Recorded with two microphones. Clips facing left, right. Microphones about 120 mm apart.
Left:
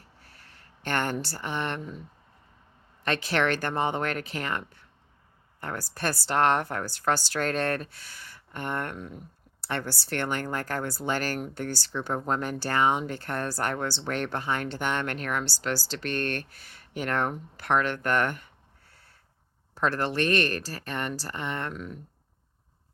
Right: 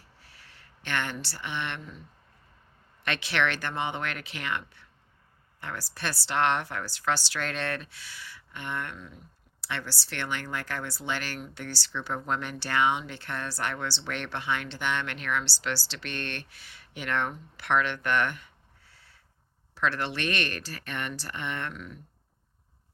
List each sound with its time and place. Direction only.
0.3 s speech: 45° left (ahead or behind)
3.0 s speech: 40° left (ahead or behind)